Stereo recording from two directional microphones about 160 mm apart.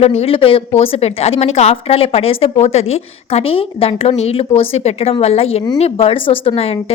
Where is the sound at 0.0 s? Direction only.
40° left (ahead or behind).